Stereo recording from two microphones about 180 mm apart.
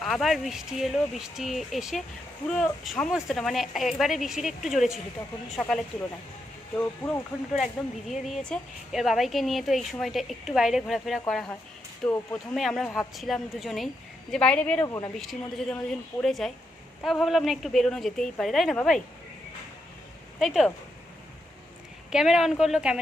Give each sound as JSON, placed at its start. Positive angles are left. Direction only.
{"t": 0.0, "sound": "a woman's voice", "side_deg": 0}
{"t": 7.0, "sound": "speech", "side_deg": 20}
{"t": 7.5, "sound": "a woman's voice", "side_deg": 0}
{"t": 15.2, "sound": "a woman's voice", "side_deg": 0}
{"t": 20.4, "sound": "a woman's voice", "side_deg": 0}
{"t": 22.1, "sound": "a woman's voice", "side_deg": -5}